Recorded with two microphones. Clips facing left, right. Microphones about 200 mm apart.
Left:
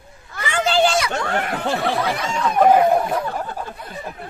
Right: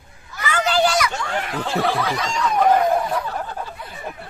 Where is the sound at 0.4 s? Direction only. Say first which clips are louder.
Left 1 dB; 30° left (ahead or behind).